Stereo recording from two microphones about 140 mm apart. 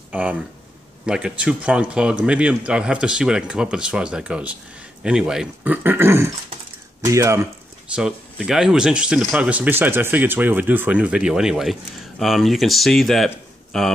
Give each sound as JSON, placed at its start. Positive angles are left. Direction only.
{"t": 0.1, "sound": "speech", "side_deg": -10}
{"t": 7.9, "sound": "speech", "side_deg": -5}